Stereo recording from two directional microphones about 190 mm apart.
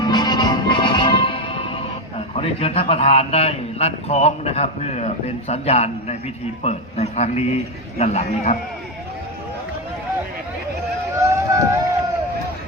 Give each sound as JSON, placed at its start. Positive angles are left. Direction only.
{"t": 0.0, "sound": "music", "side_deg": 20}
{"t": 6.6, "sound": "a man's voice", "side_deg": 35}
{"t": 11.2, "sound": "run", "side_deg": -15}